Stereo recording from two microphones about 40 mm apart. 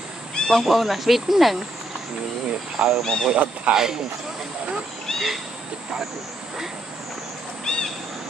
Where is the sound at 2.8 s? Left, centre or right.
Centre.